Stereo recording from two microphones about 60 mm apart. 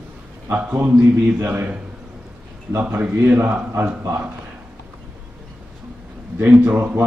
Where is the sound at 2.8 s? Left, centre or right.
Right.